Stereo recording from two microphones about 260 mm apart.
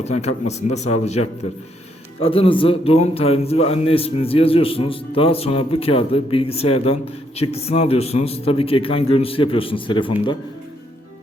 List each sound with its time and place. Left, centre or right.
0.4 s a man's voice: left
2.2 s a man's voice: left